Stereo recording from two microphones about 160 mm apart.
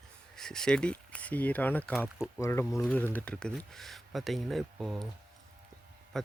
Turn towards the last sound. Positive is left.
turn(degrees=0)  # may be behind; listen again after turning